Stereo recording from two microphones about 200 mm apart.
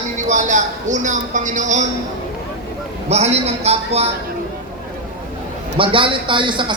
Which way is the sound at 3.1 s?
35° right (ahead or behind).